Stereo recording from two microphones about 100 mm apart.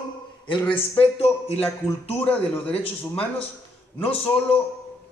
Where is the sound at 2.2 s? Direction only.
15° left (ahead or behind).